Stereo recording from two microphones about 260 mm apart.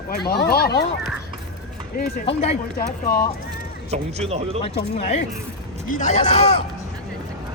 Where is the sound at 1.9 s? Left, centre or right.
Left.